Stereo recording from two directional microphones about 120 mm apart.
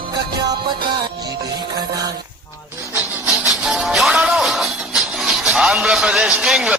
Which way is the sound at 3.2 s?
5° right (ahead or behind).